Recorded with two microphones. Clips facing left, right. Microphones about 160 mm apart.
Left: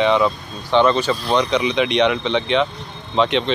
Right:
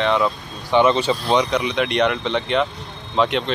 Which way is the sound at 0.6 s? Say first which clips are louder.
Even; 10° right (ahead or behind).